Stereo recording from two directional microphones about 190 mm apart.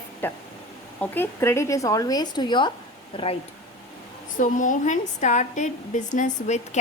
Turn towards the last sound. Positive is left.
turn(degrees=40)  # may be behind; listen again after turning